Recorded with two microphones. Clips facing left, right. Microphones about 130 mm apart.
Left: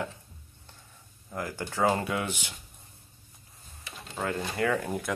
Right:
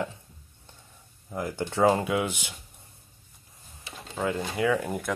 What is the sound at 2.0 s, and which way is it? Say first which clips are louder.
Speech: right 4 dB; 10° right (ahead or behind).